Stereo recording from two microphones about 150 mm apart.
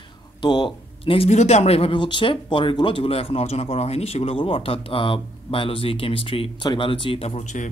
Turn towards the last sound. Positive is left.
turn(degrees=55)  # may be behind; listen again after turning